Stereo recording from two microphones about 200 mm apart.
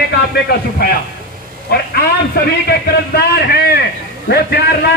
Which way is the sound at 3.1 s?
50° left (ahead or behind).